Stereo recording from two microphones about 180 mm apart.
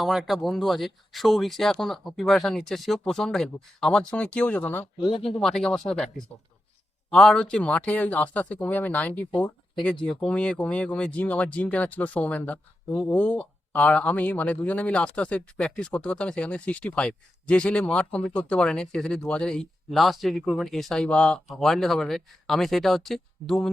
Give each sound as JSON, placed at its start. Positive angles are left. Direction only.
{"t": 0.0, "sound": "speech", "side_deg": 0}
{"t": 4.9, "sound": "speech", "side_deg": 30}
{"t": 5.4, "sound": "speech", "side_deg": 5}